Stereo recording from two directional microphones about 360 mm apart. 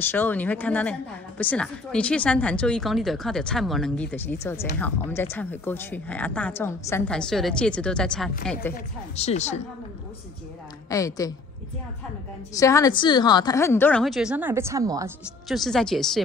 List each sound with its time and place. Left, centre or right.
0.1 s speech: centre
8.7 s speech: centre
10.9 s a woman's voice: centre
12.5 s speech: centre